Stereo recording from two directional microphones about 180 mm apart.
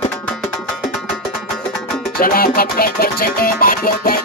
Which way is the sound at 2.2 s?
55° left (ahead or behind).